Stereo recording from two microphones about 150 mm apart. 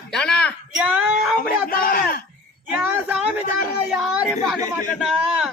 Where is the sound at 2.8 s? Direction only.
10° right (ahead or behind).